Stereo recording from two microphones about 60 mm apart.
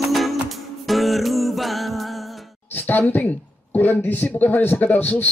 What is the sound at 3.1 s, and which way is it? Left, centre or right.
Speech, left.